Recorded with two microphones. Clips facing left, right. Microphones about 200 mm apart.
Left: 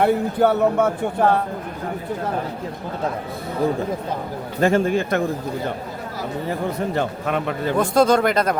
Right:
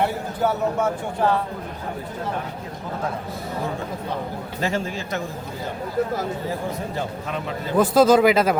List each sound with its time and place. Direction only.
0.0 s speech: 60° left (ahead or behind)
4.6 s speech: 55° left (ahead or behind)
6.5 s speech: 65° left (ahead or behind)
7.8 s speech: 5° right (ahead or behind)